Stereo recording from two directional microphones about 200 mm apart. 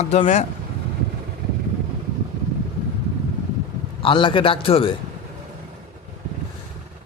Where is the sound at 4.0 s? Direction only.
25° left (ahead or behind).